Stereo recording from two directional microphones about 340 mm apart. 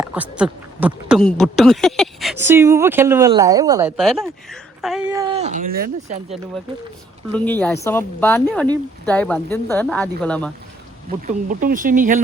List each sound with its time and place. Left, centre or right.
0.0 s speech: centre; by 6.3 s right
7.3 s speech: centre
11.3 s speech: right